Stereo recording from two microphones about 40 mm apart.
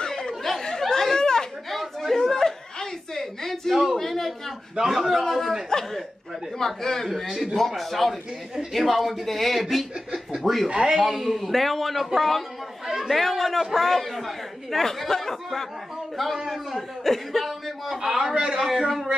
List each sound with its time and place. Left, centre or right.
0.2 s chatter: centre
1.7 s chuckle: centre
4.0 s a sound: centre
4.8 s speech: centre
5.7 s speech: centre
7.2 s a man's voice: centre
7.5 s speech: centre
10.7 s a man's voice: right
11.0 s a man's voice: centre
13.1 s speech: centre
16.7 s speech: centre
18.1 s a man's voice: centre
18.7 s speech: centre